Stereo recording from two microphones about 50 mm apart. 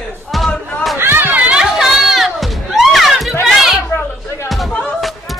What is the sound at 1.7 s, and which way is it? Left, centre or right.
Music, centre.